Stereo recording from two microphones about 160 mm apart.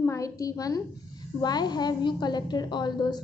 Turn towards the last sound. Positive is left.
turn(degrees=25)  # may be behind; listen again after turning